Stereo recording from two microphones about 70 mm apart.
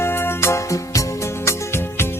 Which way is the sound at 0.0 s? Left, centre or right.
Left.